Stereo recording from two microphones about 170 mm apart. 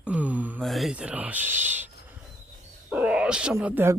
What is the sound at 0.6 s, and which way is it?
Speech, centre (ahead or behind).